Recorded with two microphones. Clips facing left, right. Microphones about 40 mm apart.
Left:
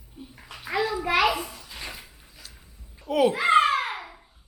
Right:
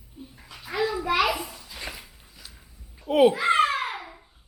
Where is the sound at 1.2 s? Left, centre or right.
Centre.